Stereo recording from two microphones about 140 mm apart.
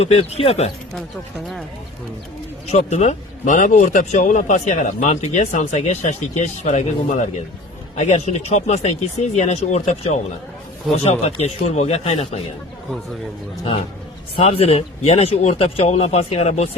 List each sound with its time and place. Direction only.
0.0 s speech: 50° left (ahead or behind)
2.7 s speech: 55° left (ahead or behind)
14.3 s speech: 45° left (ahead or behind)